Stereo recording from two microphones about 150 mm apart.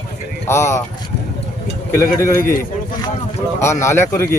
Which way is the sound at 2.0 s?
20° left (ahead or behind).